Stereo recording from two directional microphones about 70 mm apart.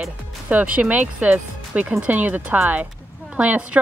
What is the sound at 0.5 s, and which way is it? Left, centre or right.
Speech, right.